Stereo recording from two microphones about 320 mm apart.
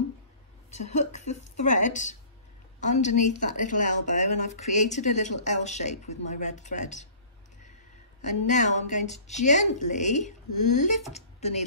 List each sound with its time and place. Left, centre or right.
0.7 s a woman's voice: left
8.3 s a woman's voice: left